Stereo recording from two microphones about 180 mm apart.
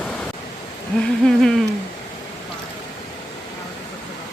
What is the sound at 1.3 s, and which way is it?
Speech, centre (ahead or behind).